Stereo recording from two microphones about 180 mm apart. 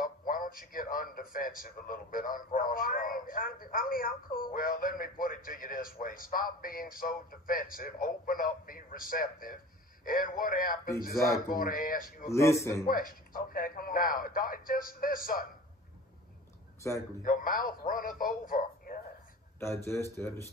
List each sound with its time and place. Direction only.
0.3 s a man's voice: 50° left (ahead or behind)
12.3 s a man's voice: 15° left (ahead or behind)
12.8 s a man's voice: 50° left (ahead or behind)
16.8 s a man's voice: 15° left (ahead or behind)
17.2 s a man's voice: 50° left (ahead or behind)
19.6 s a man's voice: 15° left (ahead or behind)